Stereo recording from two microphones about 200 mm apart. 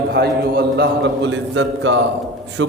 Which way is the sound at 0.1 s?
55° right (ahead or behind).